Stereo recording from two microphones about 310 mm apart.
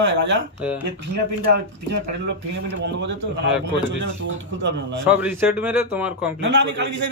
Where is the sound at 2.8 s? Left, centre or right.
Right.